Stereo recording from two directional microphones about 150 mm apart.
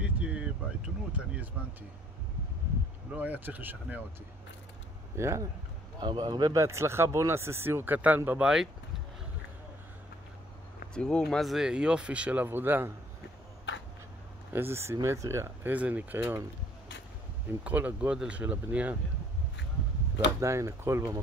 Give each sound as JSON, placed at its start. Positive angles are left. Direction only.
{"t": 0.0, "sound": "a sound", "side_deg": -10}
{"t": 1.1, "sound": "speech", "side_deg": -10}
{"t": 3.2, "sound": "speech", "side_deg": -10}
{"t": 5.1, "sound": "speech", "side_deg": -20}
{"t": 5.9, "sound": "speech", "side_deg": -30}
{"t": 11.0, "sound": "speech", "side_deg": 5}
{"t": 14.5, "sound": "speech", "side_deg": -15}
{"t": 17.5, "sound": "speech", "side_deg": -10}
{"t": 20.3, "sound": "speech", "side_deg": -20}